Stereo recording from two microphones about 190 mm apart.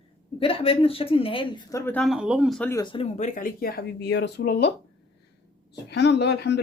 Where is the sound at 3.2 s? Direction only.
45° left (ahead or behind); by 4.7 s 60° left (ahead or behind).